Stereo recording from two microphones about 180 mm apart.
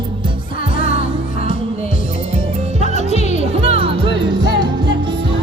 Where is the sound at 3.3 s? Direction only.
35° right (ahead or behind).